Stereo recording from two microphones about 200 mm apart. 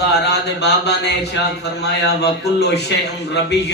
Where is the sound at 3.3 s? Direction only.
60° left (ahead or behind).